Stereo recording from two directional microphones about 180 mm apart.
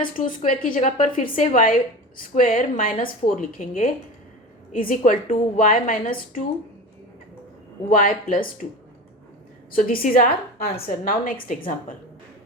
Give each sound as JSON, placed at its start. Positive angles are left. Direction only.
{"t": 0.0, "sound": "a woman's voice", "side_deg": 50}
{"t": 7.9, "sound": "a woman's voice", "side_deg": 50}
{"t": 9.7, "sound": "a woman's voice", "side_deg": 50}